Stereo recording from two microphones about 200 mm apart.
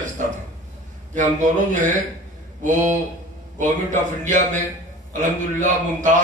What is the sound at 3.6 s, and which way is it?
A man's voice, 40° right (ahead or behind).